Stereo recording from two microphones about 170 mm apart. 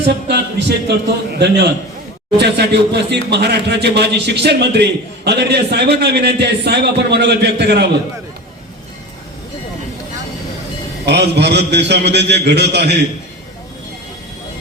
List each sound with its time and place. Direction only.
0.9 s a man's voice: 80° right
11.0 s a man's voice: 80° right